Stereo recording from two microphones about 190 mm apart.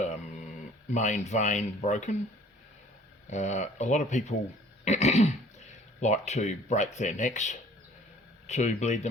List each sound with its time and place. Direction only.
0.0 s a sound: 40° left (ahead or behind)
0.9 s speech: 40° left (ahead or behind)
3.2 s speech: 40° left (ahead or behind)